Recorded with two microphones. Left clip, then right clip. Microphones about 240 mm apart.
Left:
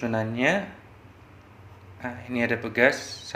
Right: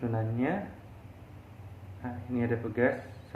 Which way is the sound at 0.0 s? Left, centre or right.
Left.